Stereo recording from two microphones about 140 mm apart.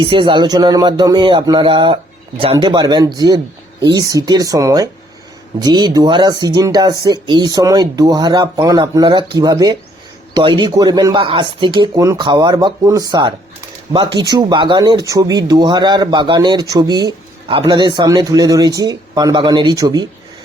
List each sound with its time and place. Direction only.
0.0 s speech: 35° right (ahead or behind)